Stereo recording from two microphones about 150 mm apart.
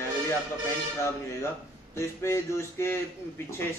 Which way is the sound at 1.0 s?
15° left (ahead or behind).